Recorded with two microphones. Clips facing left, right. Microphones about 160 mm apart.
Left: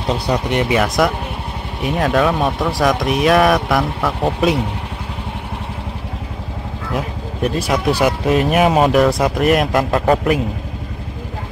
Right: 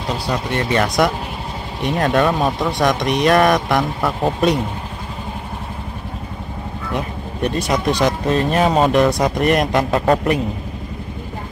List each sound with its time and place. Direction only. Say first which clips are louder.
0.3 s speech: left 3 dB; 15° left (ahead or behind)
0.7 s speech: right 3 dB; centre (ahead or behind)
6.9 s speech: left 1 dB; centre (ahead or behind)